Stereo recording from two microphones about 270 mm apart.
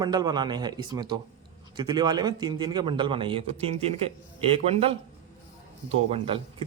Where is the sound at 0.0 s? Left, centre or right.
Centre.